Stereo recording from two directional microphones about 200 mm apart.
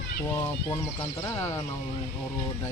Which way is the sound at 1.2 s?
15° left (ahead or behind).